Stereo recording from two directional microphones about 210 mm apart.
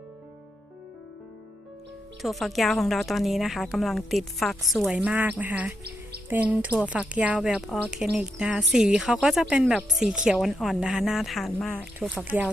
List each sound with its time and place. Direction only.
2.2 s a woman's voice: centre (ahead or behind)